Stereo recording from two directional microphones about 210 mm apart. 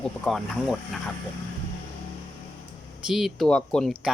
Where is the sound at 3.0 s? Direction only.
Centre (ahead or behind).